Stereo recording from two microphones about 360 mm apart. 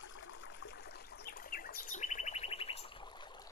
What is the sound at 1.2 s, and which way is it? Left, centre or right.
Bird, left.